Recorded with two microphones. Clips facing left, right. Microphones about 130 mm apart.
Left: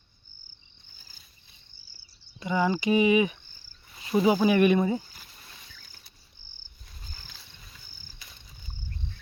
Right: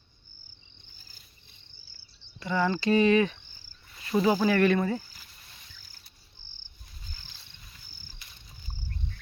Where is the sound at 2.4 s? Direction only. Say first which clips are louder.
Left 1 dB; 15° left (ahead or behind).